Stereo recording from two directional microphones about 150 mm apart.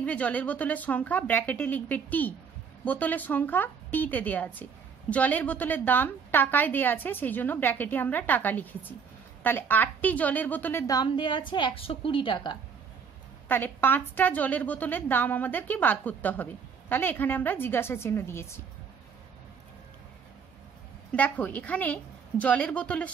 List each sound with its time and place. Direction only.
0.0 s a woman's voice: 10° left (ahead or behind); by 12.5 s 35° left (ahead or behind)
13.5 s a woman's voice: 15° left (ahead or behind)
21.1 s a woman's voice: 10° left (ahead or behind)